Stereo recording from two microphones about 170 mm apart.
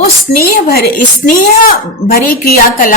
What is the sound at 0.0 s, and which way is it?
A woman's voice, 65° left (ahead or behind).